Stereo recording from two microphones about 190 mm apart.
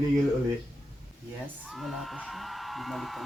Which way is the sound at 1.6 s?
Centre (ahead or behind).